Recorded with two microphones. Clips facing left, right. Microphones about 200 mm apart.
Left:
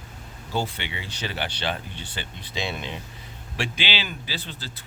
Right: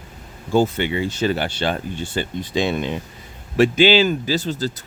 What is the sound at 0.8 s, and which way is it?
Speech, 50° right (ahead or behind).